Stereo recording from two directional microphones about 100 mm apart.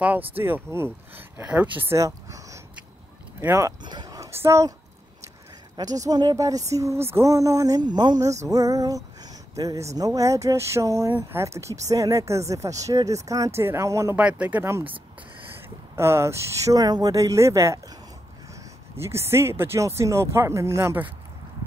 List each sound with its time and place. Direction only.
0.4 s speech: 25° right (ahead or behind)
1.4 s speech: 10° right (ahead or behind)
1.9 s speech: 35° right (ahead or behind)
3.8 s a sound: 45° right (ahead or behind)
4.3 s speech: 25° right (ahead or behind)
5.8 s speech: 40° right (ahead or behind)
8.2 s a sound: 35° right (ahead or behind)
9.9 s speech: 35° right (ahead or behind)
14.1 s speech: 15° right (ahead or behind)
16.0 s speech: 25° right (ahead or behind)
16.8 s speech: 40° right (ahead or behind)
19.0 s speech: 25° right (ahead or behind)